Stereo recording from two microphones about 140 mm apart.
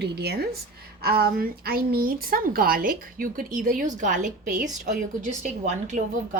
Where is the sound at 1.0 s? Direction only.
90° right.